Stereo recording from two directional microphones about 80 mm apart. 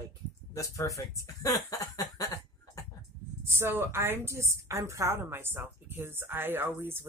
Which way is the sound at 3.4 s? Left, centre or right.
Right.